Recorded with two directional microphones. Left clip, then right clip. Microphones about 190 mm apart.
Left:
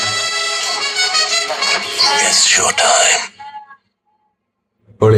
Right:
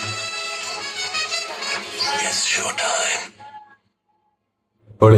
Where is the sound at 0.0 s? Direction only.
60° left (ahead or behind).